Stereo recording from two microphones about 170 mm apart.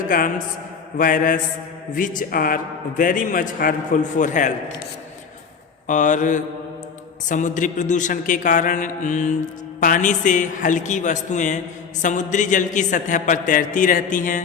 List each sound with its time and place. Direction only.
0.1 s speech: 55° left (ahead or behind)
5.9 s speech: 50° left (ahead or behind)